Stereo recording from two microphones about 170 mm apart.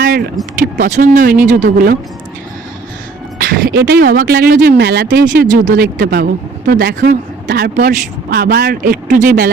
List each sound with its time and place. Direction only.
0.0 s a sound: 65° right (ahead or behind)
0.9 s speech: 45° right (ahead or behind)
3.3 s speech: 65° right (ahead or behind)